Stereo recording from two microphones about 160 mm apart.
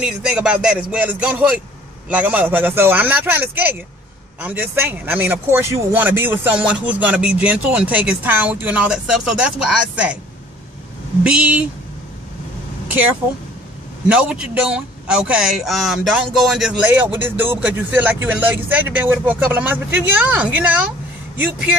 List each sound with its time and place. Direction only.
0.0 s speech: 5° right (ahead or behind)
11.2 s speech: 5° right (ahead or behind)
14.0 s speech: 5° right (ahead or behind)